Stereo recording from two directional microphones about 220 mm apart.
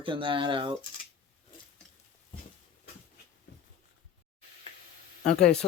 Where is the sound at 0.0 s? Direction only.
25° right (ahead or behind).